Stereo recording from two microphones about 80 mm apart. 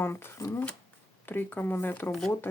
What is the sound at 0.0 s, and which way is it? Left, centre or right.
Speech, left.